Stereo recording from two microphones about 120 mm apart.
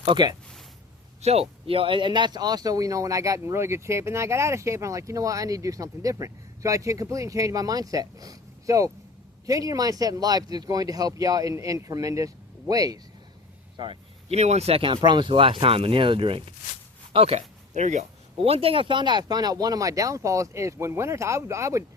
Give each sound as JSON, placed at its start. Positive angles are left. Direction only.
{"t": 0.0, "sound": "speech", "side_deg": -40}
{"t": 1.2, "sound": "speech", "side_deg": -60}
{"t": 13.7, "sound": "a sound", "side_deg": -45}
{"t": 14.3, "sound": "speech", "side_deg": -65}
{"t": 18.3, "sound": "speech", "side_deg": -55}